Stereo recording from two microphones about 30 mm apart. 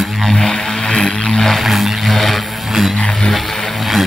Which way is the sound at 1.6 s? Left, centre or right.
Centre.